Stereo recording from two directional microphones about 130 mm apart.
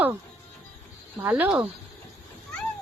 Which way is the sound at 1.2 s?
15° right (ahead or behind).